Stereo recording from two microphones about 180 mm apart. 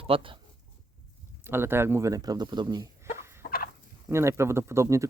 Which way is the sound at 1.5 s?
10° right (ahead or behind).